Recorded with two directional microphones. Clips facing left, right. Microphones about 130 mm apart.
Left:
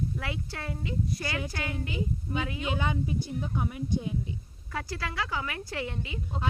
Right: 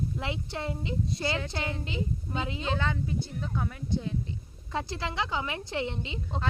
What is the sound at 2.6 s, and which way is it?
Speech, 15° left (ahead or behind).